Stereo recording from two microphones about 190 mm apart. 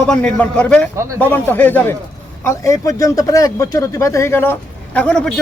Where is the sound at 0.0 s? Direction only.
5° left (ahead or behind).